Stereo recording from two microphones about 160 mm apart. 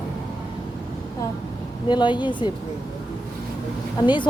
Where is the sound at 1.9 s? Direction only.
30° left (ahead or behind).